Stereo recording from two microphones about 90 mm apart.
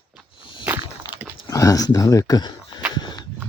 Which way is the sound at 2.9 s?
50° left (ahead or behind).